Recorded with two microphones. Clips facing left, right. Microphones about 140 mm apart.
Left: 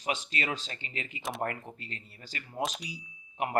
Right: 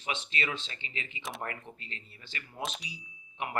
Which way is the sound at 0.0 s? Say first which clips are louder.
Left 2 dB; 40° left (ahead or behind).